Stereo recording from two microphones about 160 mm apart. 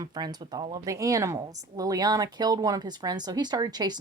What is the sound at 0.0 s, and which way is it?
Speech, 25° right (ahead or behind).